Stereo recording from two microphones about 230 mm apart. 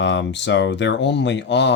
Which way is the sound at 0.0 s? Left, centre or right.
Left.